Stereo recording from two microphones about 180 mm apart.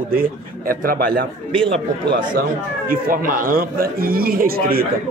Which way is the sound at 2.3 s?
50° right (ahead or behind).